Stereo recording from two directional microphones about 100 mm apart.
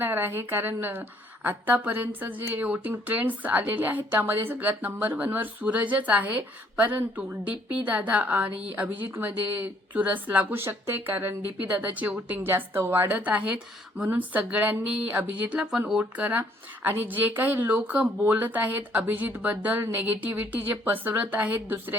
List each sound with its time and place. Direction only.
0.0 s a woman's voice: 20° right (ahead or behind)